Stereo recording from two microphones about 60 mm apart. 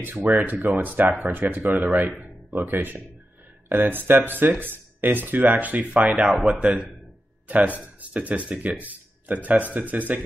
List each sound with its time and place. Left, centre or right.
0.3 s speech: right
6.5 s a man's voice: centre
7.4 s speech: right